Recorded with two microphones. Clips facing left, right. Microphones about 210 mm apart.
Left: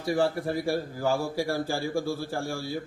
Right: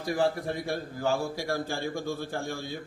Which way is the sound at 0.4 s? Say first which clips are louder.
Left 4 dB; 5° left (ahead or behind).